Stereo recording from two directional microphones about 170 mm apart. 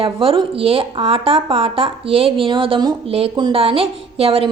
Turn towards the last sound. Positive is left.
turn(degrees=-35)  # may be behind; listen again after turning